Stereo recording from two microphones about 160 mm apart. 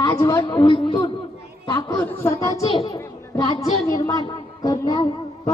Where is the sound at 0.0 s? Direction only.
25° left (ahead or behind).